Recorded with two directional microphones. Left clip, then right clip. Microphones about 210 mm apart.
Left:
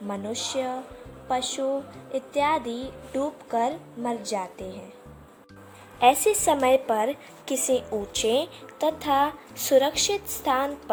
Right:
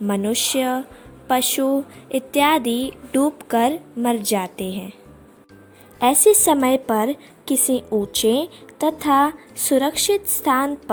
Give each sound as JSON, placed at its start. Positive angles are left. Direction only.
{"t": 0.1, "sound": "a woman's voice", "side_deg": -50}
{"t": 6.0, "sound": "a woman's voice", "side_deg": -45}